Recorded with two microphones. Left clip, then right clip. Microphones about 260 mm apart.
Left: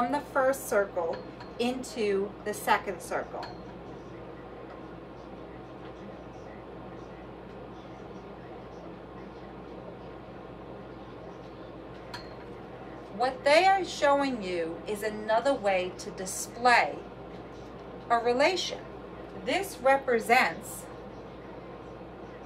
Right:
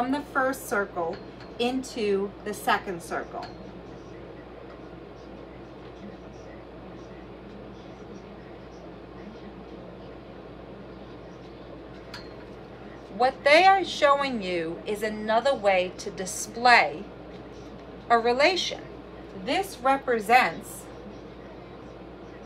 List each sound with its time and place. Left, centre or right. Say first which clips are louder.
0.1 s a woman's voice: even; centre
13.2 s a woman's voice: right 4 dB; centre
18.0 s a woman's voice: right 4 dB; right
19.4 s a woman's voice: right 1 dB; centre